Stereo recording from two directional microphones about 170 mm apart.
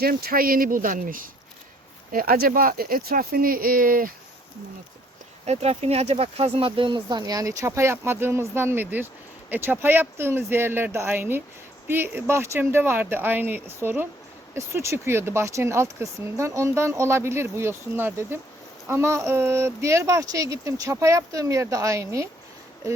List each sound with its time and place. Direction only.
0.0 s speech: 60° right (ahead or behind)
5.5 s speech: 40° right (ahead or behind); by 22.3 s 15° right (ahead or behind)